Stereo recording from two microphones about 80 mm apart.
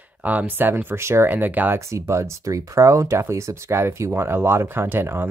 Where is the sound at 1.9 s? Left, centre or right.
Right.